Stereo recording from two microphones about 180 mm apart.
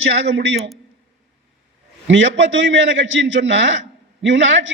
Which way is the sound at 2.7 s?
90° right.